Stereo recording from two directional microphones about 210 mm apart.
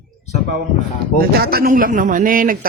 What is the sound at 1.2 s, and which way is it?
A man's voice, 50° right (ahead or behind).